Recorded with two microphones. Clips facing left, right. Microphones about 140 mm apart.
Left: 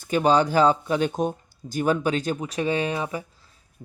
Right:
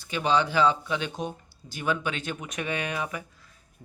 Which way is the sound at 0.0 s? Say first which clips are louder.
Left 5 dB; 45° left (ahead or behind).